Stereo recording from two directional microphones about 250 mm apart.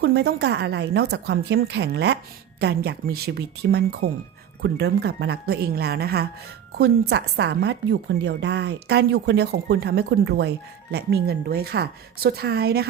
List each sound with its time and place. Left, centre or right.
0.0 s a woman's voice: right